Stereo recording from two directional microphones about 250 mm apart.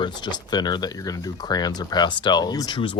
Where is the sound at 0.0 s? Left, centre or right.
Centre.